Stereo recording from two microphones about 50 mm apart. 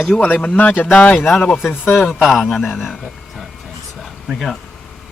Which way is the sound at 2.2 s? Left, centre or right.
Centre.